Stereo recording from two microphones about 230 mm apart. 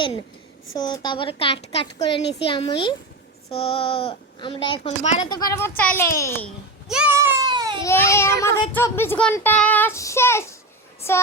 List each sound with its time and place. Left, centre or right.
0.0 s a child's voice: left
5.3 s speech: centre
6.8 s a sound: centre
7.8 s speech: centre